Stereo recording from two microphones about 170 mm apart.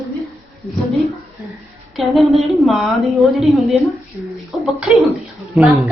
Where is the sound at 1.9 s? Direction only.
Centre (ahead or behind).